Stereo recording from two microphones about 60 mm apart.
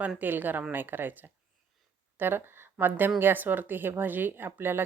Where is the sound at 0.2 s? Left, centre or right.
Right.